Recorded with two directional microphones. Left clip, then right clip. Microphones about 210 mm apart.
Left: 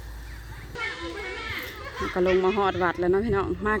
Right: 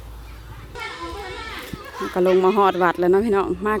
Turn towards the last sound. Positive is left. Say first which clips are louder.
# right 5 dB
turn(degrees=-10)  # may be behind; listen again after turning